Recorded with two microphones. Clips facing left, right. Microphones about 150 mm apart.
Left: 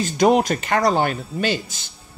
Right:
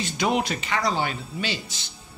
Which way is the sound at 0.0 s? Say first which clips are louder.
Left 8 dB; 45° left (ahead or behind).